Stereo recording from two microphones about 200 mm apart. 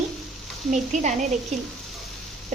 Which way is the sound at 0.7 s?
35° right (ahead or behind).